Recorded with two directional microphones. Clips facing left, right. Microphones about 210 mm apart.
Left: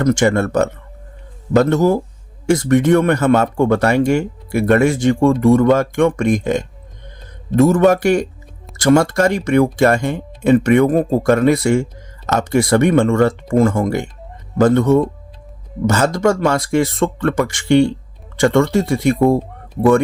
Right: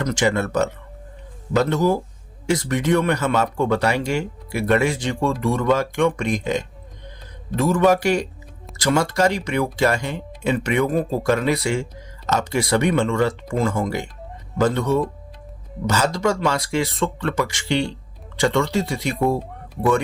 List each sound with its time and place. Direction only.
0.0 s speech: 50° left (ahead or behind)